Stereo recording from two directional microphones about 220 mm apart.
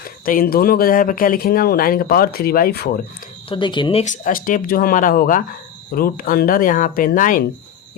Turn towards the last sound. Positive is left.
turn(degrees=40)  # may be behind; listen again after turning